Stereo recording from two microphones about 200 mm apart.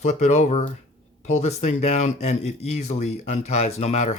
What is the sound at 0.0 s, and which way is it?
Speech, 35° left (ahead or behind).